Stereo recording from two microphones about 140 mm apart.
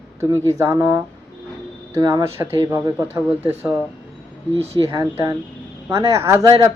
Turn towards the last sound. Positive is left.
turn(degrees=-20)  # may be behind; listen again after turning